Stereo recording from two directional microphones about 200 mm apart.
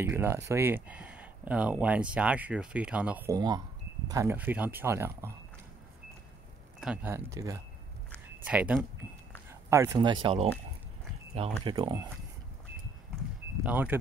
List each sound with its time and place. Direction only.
0.0 s speech: 10° right (ahead or behind)
6.8 s speech: 5° right (ahead or behind)
8.5 s speech: 5° right (ahead or behind)
10.2 s speech: 30° right (ahead or behind)
11.7 s speech: 20° right (ahead or behind)
13.7 s speech: 10° right (ahead or behind)